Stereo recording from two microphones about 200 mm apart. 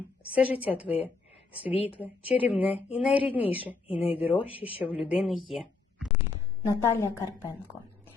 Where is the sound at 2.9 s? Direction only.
5° right (ahead or behind).